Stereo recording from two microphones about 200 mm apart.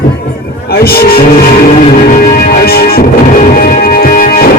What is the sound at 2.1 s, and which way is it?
Music, 50° left (ahead or behind).